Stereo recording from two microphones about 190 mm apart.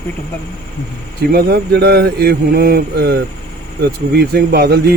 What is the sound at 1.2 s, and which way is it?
A man's voice, 55° right (ahead or behind).